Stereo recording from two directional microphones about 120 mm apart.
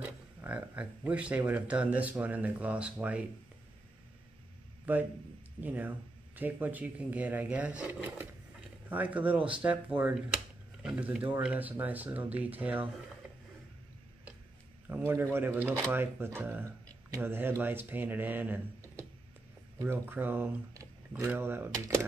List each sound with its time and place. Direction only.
0.0 s speech: 15° right (ahead or behind)
5.6 s speech: 15° right (ahead or behind)
14.9 s speech: 20° right (ahead or behind)
19.8 s speech: 20° right (ahead or behind)